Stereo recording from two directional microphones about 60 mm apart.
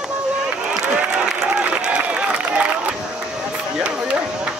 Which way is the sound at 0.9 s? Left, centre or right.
Centre.